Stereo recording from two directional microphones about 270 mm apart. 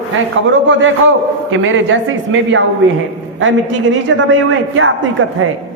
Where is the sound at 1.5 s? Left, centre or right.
Right.